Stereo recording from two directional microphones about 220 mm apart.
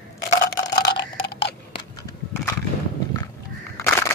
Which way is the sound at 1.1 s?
25° left (ahead or behind).